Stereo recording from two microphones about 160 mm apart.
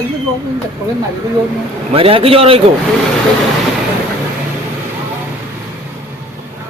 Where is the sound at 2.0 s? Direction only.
35° right (ahead or behind).